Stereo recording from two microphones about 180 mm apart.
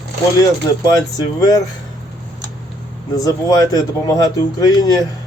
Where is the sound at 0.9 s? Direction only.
20° left (ahead or behind).